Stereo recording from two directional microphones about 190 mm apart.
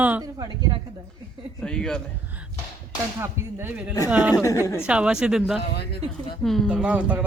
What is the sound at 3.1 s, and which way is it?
Speech, 10° right (ahead or behind).